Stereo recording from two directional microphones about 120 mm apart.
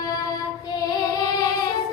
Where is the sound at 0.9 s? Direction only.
30° left (ahead or behind).